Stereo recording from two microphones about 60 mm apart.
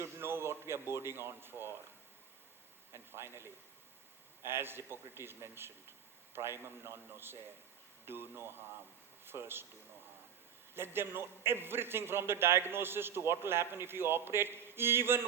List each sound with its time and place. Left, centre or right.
0.0 s a sound: right
2.9 s a man's voice: right
10.8 s a man's voice: right